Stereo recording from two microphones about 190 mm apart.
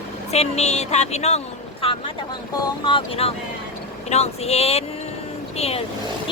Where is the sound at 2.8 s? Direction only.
30° left (ahead or behind).